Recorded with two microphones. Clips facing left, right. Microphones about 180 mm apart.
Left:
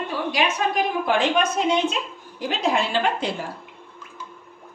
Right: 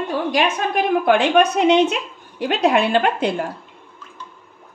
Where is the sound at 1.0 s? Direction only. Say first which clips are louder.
Right 7 dB; 65° right (ahead or behind).